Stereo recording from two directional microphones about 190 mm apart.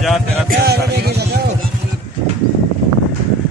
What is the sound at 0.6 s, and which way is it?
Music, 60° right (ahead or behind).